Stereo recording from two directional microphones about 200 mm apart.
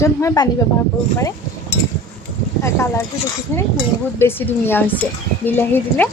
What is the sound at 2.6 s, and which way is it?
Speech, 15° left (ahead or behind).